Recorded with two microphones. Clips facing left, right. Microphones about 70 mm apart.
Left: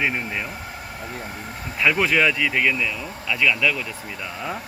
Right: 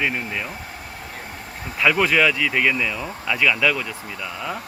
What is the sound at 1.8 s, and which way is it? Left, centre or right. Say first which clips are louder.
Speech: right 1 dB; centre.